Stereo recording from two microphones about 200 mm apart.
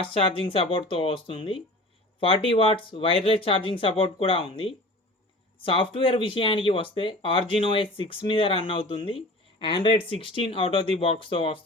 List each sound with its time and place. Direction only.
0.0 s speech: 30° left (ahead or behind)